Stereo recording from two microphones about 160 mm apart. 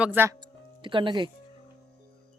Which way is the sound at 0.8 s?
30° right (ahead or behind).